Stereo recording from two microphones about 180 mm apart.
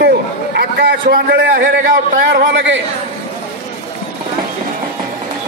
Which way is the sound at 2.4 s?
75° right (ahead or behind).